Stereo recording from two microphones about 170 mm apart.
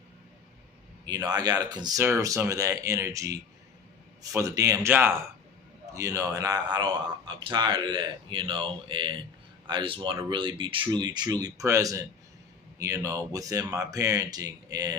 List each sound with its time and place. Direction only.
1.0 s a man's voice: 25° right (ahead or behind)